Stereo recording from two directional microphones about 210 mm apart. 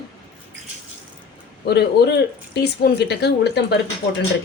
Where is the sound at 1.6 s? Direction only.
50° left (ahead or behind).